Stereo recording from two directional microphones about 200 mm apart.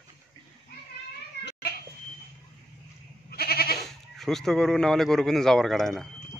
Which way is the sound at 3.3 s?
50° left (ahead or behind).